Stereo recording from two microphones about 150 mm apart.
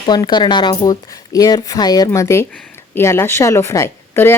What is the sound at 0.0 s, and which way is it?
Speech, 30° left (ahead or behind).